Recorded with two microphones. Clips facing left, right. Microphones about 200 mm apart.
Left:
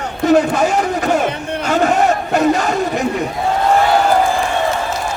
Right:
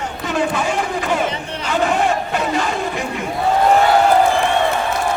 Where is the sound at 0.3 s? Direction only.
40° left (ahead or behind).